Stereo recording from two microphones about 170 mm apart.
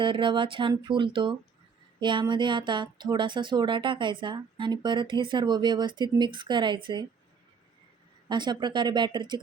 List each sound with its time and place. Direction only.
0.0 s speech: 30° right (ahead or behind)
8.3 s speech: 25° right (ahead or behind)